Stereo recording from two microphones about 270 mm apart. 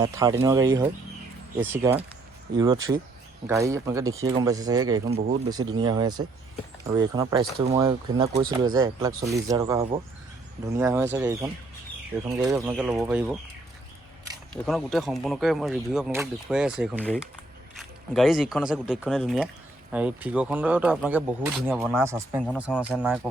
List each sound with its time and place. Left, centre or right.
0.0 s speech: centre
3.4 s speech: centre
14.5 s speech: centre